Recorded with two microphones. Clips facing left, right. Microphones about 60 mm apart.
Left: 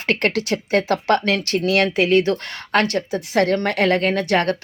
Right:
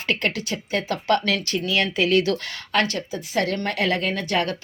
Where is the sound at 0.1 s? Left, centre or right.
Left.